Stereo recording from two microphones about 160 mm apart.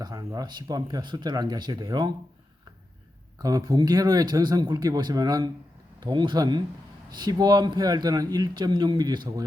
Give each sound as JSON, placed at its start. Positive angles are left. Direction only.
{"t": 0.0, "sound": "a sound", "side_deg": -25}
{"t": 0.3, "sound": "a man's voice", "side_deg": -25}
{"t": 3.3, "sound": "a man's voice", "side_deg": -25}